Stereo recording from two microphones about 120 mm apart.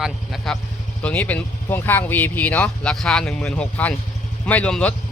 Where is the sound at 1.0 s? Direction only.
15° left (ahead or behind).